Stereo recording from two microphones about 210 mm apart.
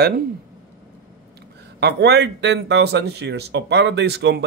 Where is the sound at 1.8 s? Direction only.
55° right (ahead or behind).